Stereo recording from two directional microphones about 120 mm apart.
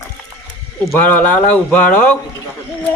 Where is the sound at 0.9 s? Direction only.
15° left (ahead or behind).